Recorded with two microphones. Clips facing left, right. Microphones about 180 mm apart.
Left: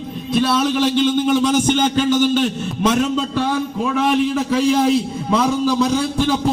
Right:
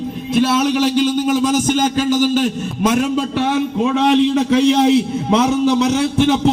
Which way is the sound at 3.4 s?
20° right (ahead or behind).